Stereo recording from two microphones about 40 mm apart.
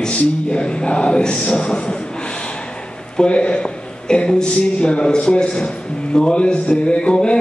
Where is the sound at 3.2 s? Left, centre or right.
Left.